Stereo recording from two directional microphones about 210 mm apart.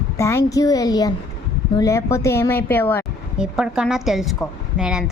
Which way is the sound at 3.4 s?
5° right (ahead or behind).